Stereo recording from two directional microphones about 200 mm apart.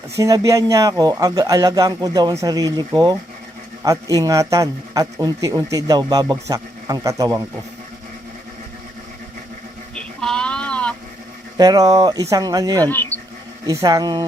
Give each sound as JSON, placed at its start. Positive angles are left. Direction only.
{"t": 0.2, "sound": "a man's voice", "side_deg": -15}
{"t": 9.9, "sound": "sheep", "side_deg": 5}
{"t": 11.5, "sound": "speech", "side_deg": -20}
{"t": 12.9, "sound": "speech", "side_deg": 10}
{"t": 13.7, "sound": "speech", "side_deg": -15}